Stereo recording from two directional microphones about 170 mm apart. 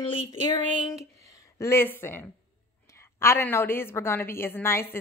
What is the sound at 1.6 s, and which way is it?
A woman's voice, 15° left (ahead or behind).